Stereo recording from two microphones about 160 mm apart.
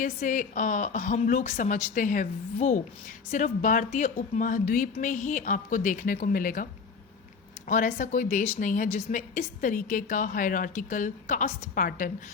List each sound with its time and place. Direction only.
0.0 s a woman's voice: 55° left (ahead or behind)
7.7 s a woman's voice: 55° left (ahead or behind)